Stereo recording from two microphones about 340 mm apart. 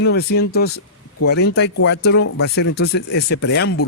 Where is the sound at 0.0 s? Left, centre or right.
Left.